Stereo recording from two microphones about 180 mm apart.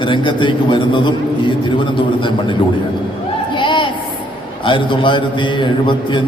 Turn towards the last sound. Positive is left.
turn(degrees=25)  # may be behind; listen again after turning